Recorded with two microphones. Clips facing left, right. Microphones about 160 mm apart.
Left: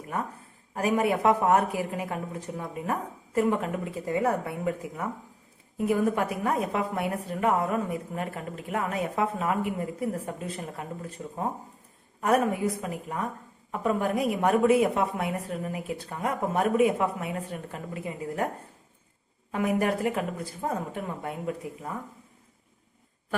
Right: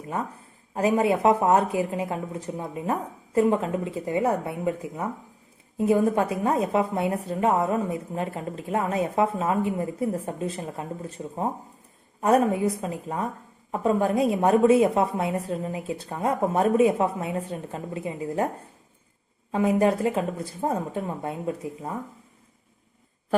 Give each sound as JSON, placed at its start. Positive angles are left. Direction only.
{"t": 0.7, "sound": "a woman's voice", "side_deg": -25}
{"t": 19.5, "sound": "a woman's voice", "side_deg": -25}